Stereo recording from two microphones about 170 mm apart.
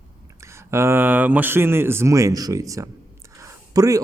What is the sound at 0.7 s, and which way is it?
A man's voice, 15° right (ahead or behind).